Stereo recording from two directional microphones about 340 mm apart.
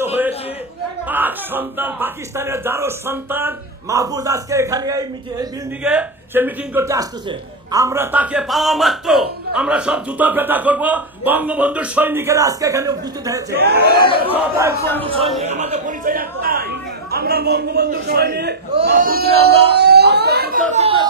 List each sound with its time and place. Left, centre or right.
1.0 s speech: centre
13.5 s a man's voice: right
14.2 s a man's voice: centre